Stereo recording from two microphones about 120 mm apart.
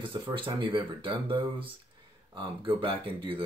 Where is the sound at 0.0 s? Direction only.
45° right (ahead or behind).